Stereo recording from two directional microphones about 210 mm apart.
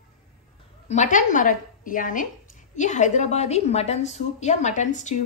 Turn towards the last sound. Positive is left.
turn(degrees=35)  # may be behind; listen again after turning